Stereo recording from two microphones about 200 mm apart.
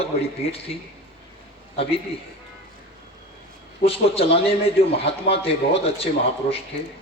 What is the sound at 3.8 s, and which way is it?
A man's voice, 30° left (ahead or behind).